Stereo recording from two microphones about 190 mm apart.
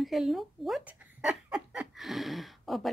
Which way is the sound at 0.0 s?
Centre (ahead or behind).